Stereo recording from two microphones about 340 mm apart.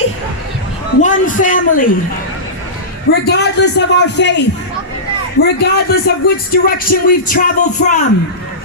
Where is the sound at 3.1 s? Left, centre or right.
Left.